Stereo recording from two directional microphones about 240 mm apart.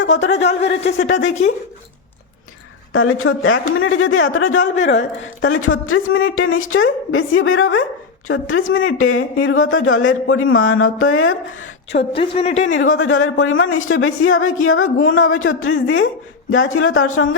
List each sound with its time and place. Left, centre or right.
0.0 s a woman's voice: left
2.9 s speech: left
11.9 s speech: left
12.6 s speech: left